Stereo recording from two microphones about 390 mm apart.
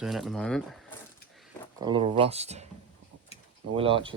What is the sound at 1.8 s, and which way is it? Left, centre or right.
Speech, centre.